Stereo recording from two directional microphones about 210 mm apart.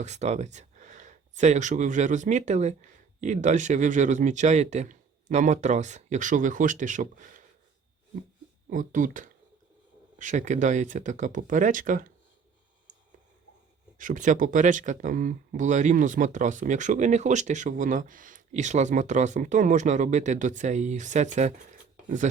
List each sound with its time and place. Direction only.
0.0 s speech: 30° right (ahead or behind)
8.7 s speech: 40° right (ahead or behind)
14.0 s speech: 35° right (ahead or behind)